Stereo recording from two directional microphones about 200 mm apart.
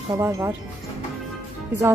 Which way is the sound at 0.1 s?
15° right (ahead or behind).